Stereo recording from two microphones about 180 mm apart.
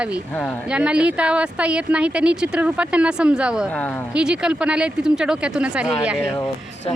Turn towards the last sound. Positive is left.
turn(degrees=-5)  # may be behind; listen again after turning